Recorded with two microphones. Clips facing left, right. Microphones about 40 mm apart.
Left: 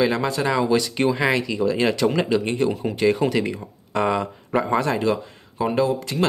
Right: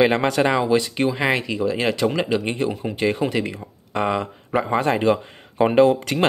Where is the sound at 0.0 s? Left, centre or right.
Right.